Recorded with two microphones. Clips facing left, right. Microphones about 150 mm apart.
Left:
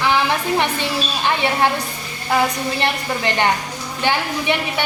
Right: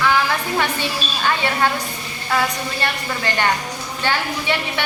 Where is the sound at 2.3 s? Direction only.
20° left (ahead or behind).